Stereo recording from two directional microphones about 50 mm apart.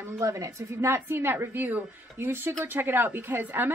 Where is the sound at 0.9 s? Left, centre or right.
Right.